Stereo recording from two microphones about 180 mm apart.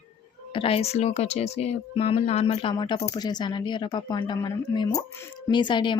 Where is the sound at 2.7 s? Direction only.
25° left (ahead or behind).